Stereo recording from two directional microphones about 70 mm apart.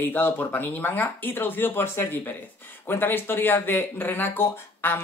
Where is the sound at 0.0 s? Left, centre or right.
Left.